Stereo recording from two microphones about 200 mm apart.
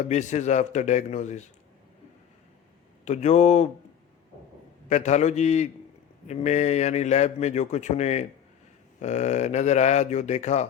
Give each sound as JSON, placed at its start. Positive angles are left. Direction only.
{"t": 0.0, "sound": "speech", "side_deg": 35}
{"t": 3.0, "sound": "speech", "side_deg": 35}
{"t": 4.9, "sound": "speech", "side_deg": 35}